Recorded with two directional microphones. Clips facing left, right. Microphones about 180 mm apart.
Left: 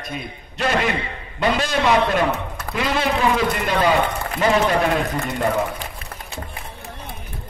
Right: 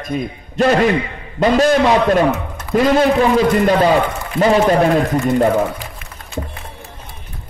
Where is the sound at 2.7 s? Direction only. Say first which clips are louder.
Right 9 dB; 40° right (ahead or behind).